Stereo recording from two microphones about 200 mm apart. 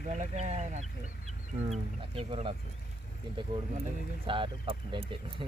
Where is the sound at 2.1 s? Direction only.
30° right (ahead or behind).